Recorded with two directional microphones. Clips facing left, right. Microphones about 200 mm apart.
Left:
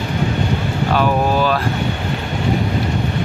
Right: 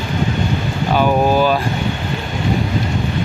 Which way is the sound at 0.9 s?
Centre (ahead or behind).